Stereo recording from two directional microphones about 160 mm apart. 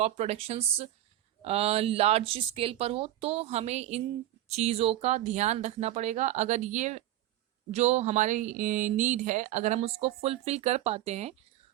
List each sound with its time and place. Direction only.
0.0 s speech: 40° right (ahead or behind)